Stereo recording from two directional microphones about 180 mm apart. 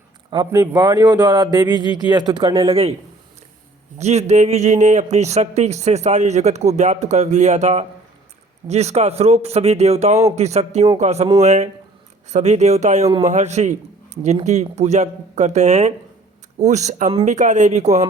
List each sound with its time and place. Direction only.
0.3 s speech: 25° right (ahead or behind)
1.8 s speech: 25° left (ahead or behind)
2.0 s speech: 25° right (ahead or behind)
3.9 s a man's voice: 35° right (ahead or behind)
13.1 s speech: 20° right (ahead or behind)
13.3 s a man's voice: 40° right (ahead or behind)